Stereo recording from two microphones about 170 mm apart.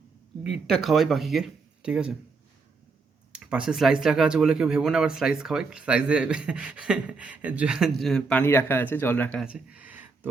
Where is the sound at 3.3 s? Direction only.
5° right (ahead or behind); by 9.4 s 10° left (ahead or behind).